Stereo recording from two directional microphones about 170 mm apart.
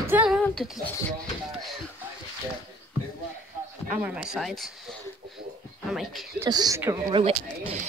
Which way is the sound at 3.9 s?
5° right (ahead or behind).